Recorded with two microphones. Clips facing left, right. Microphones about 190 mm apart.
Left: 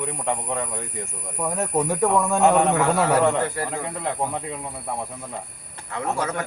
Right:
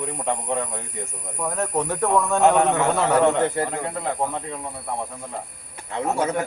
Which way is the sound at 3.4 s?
25° right (ahead or behind).